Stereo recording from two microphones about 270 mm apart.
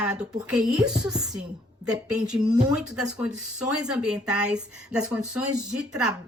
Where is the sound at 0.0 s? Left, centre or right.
Centre.